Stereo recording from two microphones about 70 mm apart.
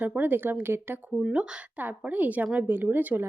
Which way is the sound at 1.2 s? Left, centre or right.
Centre.